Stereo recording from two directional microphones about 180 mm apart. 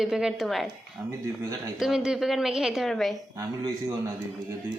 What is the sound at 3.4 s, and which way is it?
Speech, 20° right (ahead or behind).